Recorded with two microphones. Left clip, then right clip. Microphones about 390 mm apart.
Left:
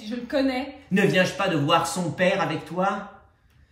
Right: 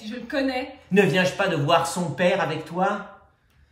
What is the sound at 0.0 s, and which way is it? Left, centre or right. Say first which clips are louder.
Speech: left 1 dB; centre.